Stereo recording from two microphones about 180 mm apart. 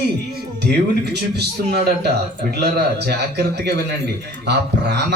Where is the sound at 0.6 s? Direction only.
65° right (ahead or behind).